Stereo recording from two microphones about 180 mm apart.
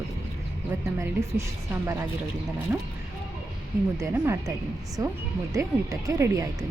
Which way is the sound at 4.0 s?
15° right (ahead or behind).